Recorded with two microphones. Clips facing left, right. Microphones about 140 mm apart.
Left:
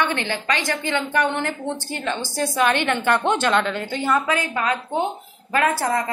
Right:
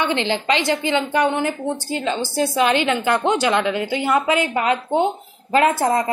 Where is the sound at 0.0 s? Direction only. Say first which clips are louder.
Right 3 dB; 20° right (ahead or behind).